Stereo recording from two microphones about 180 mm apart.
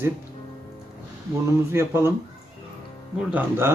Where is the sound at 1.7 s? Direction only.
15° right (ahead or behind).